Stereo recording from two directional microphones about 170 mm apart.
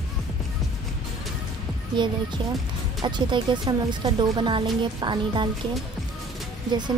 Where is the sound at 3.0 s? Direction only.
25° right (ahead or behind).